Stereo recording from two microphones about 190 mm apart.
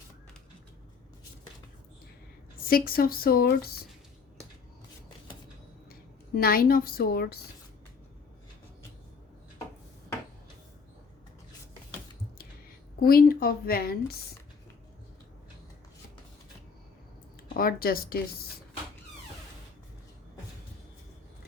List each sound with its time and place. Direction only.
2.6 s speech: 50° left (ahead or behind)
6.3 s speech: 50° left (ahead or behind)
13.0 s speech: 50° left (ahead or behind)
17.6 s speech: 50° left (ahead or behind)